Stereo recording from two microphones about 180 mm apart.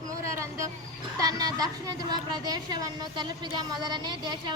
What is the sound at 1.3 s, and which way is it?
Child singing, 20° right (ahead or behind).